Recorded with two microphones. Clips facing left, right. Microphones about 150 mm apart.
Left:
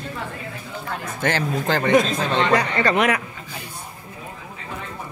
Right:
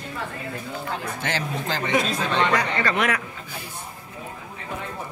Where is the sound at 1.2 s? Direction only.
55° left (ahead or behind).